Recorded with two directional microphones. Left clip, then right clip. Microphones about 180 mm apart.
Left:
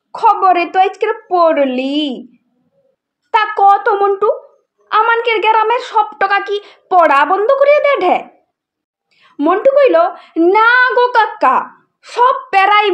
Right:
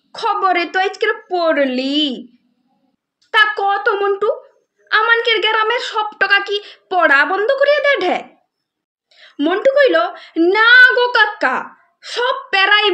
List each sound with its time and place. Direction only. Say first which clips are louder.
0.1 s a sound: left 6 dB; 15° right (ahead or behind)
0.7 s a child's voice: left 4 dB; 15° right (ahead or behind)
3.3 s a child's voice: left 4 dB; 20° right (ahead or behind)